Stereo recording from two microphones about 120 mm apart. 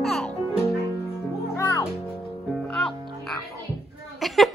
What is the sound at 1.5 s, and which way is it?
Music, 30° left (ahead or behind).